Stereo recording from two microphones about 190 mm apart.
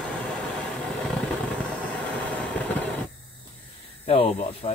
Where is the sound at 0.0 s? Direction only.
5° left (ahead or behind).